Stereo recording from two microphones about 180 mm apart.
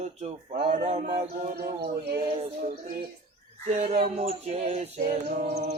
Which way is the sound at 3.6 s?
40° right (ahead or behind).